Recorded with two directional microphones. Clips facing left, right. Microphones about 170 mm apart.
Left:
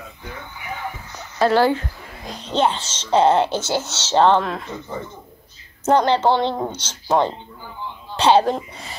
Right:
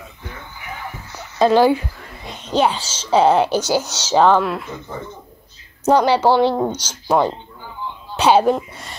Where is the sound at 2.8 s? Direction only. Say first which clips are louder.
Right 1 dB; 10° right (ahead or behind).